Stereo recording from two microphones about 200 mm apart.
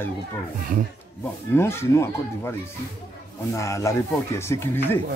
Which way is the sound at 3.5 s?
15° left (ahead or behind).